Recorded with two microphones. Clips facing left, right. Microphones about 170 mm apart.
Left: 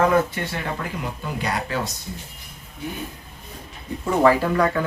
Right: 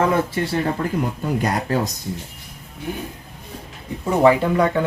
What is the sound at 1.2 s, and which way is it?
Speech, 45° right (ahead or behind).